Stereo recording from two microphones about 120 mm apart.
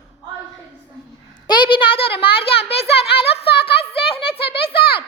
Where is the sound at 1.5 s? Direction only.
40° left (ahead or behind).